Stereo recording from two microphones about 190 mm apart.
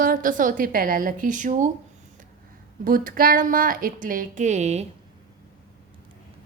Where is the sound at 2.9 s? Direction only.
45° right (ahead or behind).